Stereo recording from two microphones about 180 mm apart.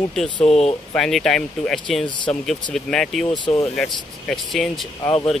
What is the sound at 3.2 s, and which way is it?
Speech, 25° left (ahead or behind).